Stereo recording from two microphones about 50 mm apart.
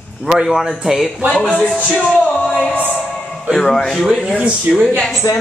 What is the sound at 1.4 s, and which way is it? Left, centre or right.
Speech, left.